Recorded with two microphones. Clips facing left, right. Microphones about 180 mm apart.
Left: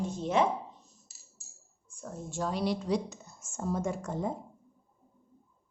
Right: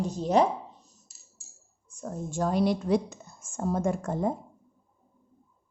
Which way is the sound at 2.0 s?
45° right (ahead or behind).